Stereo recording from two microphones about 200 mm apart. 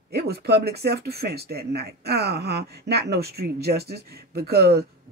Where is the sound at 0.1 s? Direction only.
55° right (ahead or behind).